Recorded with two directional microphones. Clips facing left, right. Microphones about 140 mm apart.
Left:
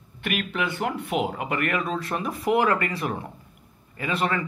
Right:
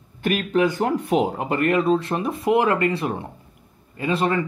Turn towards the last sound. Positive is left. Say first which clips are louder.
# right 4 dB
turn(degrees=-25)  # may be behind; listen again after turning